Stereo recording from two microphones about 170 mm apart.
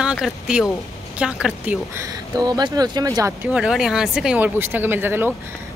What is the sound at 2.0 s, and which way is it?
Speech, 25° right (ahead or behind).